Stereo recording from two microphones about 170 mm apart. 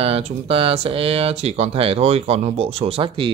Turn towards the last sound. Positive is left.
turn(degrees=-35)  # may be behind; listen again after turning